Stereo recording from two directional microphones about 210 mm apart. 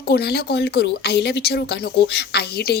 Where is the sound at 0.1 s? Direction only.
50° left (ahead or behind).